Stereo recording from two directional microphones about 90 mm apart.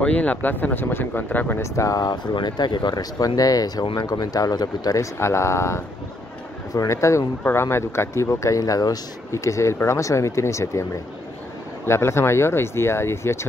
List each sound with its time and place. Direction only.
0.0 s speech: 15° left (ahead or behind)
1.6 s speech: 35° left (ahead or behind)
2.3 s speech: 55° left (ahead or behind)
5.2 s speech: 30° left (ahead or behind)